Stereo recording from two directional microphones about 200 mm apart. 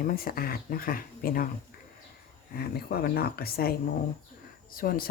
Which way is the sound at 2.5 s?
50° left (ahead or behind).